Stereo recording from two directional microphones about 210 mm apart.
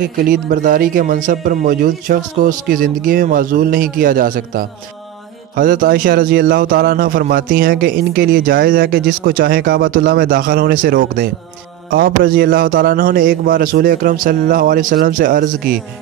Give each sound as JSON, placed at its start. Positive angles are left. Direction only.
{"t": 0.3, "sound": "a man's voice", "side_deg": -40}